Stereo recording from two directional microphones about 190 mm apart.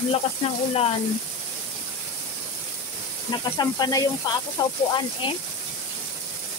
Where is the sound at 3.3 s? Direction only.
20° left (ahead or behind).